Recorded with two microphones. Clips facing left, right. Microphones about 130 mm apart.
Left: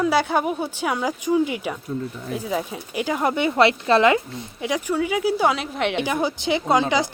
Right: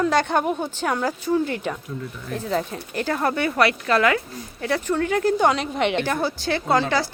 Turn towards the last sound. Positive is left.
turn(degrees=15)  # may be behind; listen again after turning